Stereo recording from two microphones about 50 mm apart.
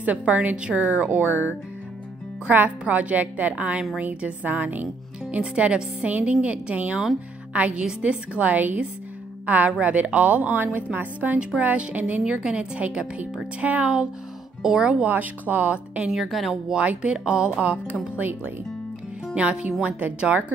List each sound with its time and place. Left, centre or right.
0.3 s speech: right
5.3 s speech: right
12.3 s speech: centre
14.6 s speech: centre
15.0 s speech: right
16.1 s speech: centre
16.7 s speech: right
19.3 s speech: right